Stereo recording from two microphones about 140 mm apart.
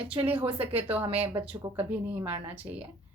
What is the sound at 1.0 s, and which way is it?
Speech, 40° right (ahead or behind).